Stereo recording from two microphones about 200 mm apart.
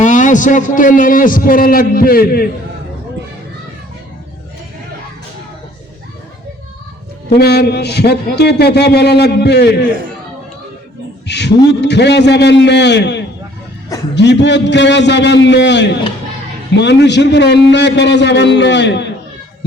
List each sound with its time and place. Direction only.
0.0 s a man's voice: 40° left (ahead or behind)
7.3 s a man's voice: 55° left (ahead or behind)
11.3 s a sound: 60° left (ahead or behind)
11.8 s a man's voice: 60° left (ahead or behind)